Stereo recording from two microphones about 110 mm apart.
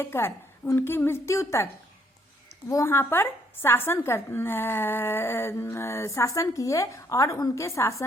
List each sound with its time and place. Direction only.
0.0 s a woman's voice: 20° left (ahead or behind)